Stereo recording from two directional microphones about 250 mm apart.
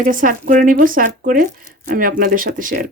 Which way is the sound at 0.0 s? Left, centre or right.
Right.